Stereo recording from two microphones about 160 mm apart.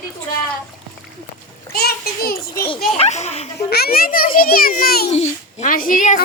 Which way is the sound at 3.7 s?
75° left (ahead or behind).